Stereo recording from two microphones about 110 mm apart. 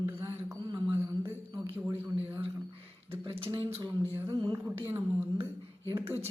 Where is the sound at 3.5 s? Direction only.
25° right (ahead or behind).